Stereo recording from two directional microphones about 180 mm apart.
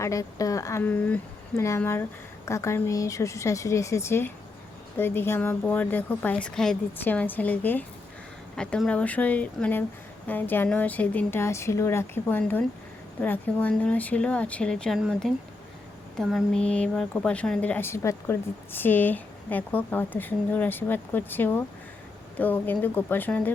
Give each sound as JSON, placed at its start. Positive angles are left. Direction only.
{"t": 0.0, "sound": "speech", "side_deg": 20}